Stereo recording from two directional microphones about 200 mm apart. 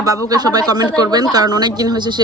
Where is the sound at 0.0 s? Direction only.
20° right (ahead or behind).